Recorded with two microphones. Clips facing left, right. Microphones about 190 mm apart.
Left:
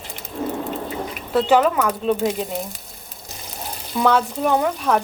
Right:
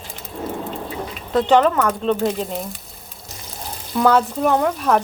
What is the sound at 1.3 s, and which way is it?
Speech, 10° left (ahead or behind).